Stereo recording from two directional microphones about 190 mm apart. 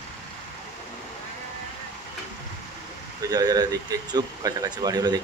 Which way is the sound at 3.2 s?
20° right (ahead or behind).